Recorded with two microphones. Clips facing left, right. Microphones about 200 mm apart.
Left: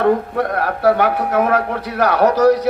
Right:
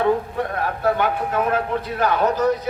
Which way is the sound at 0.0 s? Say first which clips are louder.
Left 4 dB; 70° left (ahead or behind).